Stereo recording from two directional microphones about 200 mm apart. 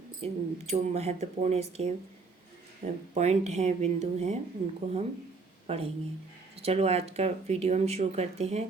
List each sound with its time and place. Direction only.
0.2 s a woman's voice: 30° right (ahead or behind)